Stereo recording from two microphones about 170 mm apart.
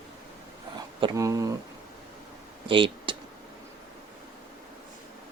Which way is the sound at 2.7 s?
30° right (ahead or behind).